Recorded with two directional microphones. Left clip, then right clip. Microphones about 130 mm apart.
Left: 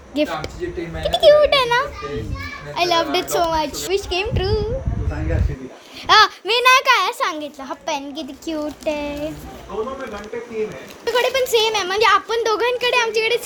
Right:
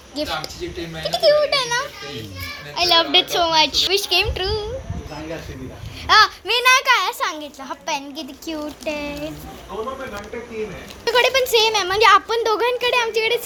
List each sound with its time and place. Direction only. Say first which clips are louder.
0.1 s a child's voice: left 3 dB; 40° left (ahead or behind)
2.7 s a child's voice: right 3 dB; 5° left (ahead or behind)
3.9 s speech: right 2 dB; 10° left (ahead or behind)
6.1 s a child's voice: left 1 dB; 80° left
6.4 s a child's voice: left 2 dB; 40° left (ahead or behind)
11.0 s speech: right 2 dB; 15° right (ahead or behind)
11.9 s speech: right 2 dB; 40° right (ahead or behind)
12.3 s speech: even; 25° right (ahead or behind)